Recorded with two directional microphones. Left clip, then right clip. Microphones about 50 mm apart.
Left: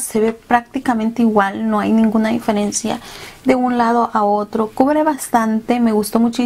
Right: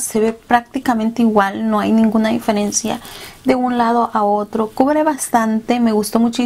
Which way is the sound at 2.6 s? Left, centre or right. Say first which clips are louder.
Right 1 dB; centre.